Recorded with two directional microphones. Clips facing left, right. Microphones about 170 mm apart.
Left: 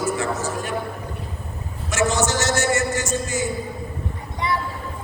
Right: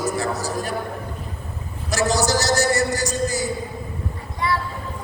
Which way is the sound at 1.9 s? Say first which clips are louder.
Right 1 dB; 35° right (ahead or behind).